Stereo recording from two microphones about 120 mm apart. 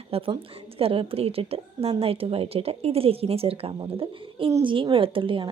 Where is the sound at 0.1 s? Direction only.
50° right (ahead or behind).